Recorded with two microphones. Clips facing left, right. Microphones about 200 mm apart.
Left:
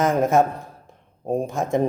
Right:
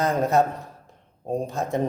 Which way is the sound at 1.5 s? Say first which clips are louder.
Left 4 dB; 15° left (ahead or behind).